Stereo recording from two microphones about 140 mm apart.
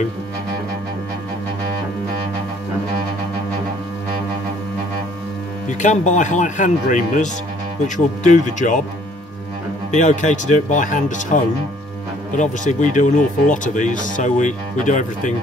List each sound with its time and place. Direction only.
5.7 s speech: 60° left (ahead or behind)
9.8 s speech: 60° left (ahead or behind)